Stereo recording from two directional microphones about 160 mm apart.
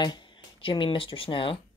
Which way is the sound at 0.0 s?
30° left (ahead or behind).